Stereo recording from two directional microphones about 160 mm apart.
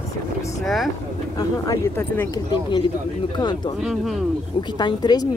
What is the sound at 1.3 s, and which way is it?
Speech, 15° left (ahead or behind).